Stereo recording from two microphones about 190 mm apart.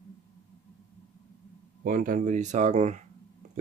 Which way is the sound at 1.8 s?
45° right (ahead or behind).